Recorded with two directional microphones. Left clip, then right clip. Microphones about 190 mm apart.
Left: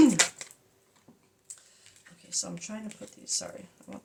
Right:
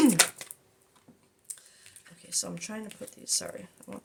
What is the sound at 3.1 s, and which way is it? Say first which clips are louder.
Speech: right 2 dB; 55° right (ahead or behind).